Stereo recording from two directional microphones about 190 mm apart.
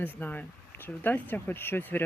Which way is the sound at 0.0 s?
10° left (ahead or behind).